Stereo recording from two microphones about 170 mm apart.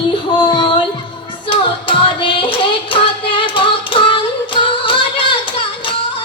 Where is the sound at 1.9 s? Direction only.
30° left (ahead or behind).